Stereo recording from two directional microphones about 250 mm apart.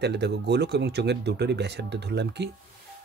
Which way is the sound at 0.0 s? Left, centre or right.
Right.